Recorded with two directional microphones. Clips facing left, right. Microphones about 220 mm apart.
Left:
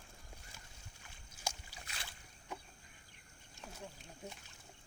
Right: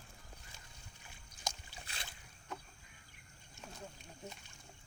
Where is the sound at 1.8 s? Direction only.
30° right (ahead or behind).